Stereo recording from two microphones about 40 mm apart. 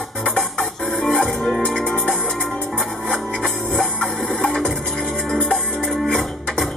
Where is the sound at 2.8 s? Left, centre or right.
Left.